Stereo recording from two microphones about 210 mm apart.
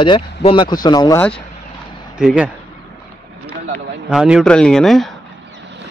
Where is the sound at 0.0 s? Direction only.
25° left (ahead or behind).